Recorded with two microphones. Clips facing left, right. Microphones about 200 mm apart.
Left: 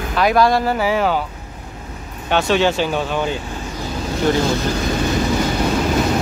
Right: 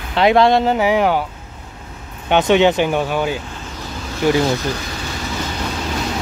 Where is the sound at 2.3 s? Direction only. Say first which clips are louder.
Right 3 dB; 20° right (ahead or behind).